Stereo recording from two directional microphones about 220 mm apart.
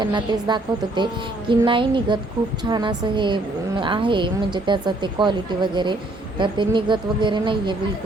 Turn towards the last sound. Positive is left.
turn(degrees=-20)  # may be behind; listen again after turning